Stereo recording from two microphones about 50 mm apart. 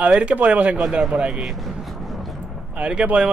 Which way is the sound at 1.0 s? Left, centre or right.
Centre.